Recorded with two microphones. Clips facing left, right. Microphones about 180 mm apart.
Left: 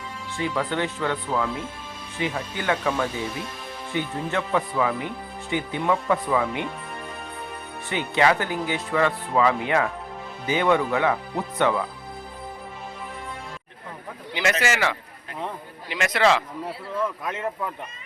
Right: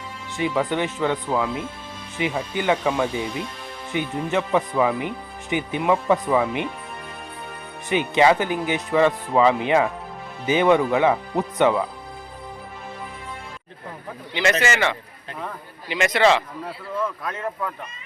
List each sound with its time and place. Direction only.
0.3 s speech: 15° right (ahead or behind)
7.9 s speech: 20° right (ahead or behind)
14.6 s a man's voice: 5° left (ahead or behind)